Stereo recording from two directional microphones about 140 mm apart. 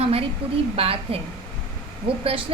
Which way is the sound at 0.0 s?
45° right (ahead or behind).